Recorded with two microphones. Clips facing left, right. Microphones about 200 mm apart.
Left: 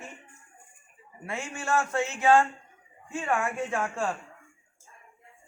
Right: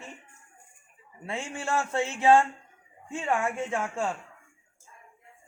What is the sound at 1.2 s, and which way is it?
A man's voice, 30° right (ahead or behind).